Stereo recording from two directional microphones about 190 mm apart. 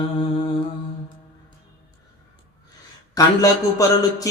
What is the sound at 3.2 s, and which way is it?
Mantra, 20° left (ahead or behind).